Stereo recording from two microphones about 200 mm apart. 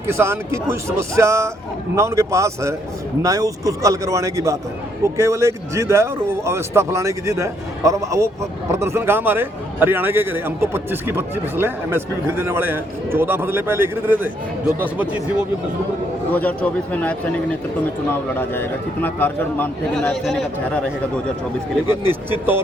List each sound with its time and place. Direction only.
0.1 s a man's voice: 10° right (ahead or behind)
16.3 s a man's voice: 5° left (ahead or behind)
22.0 s a man's voice: 10° right (ahead or behind)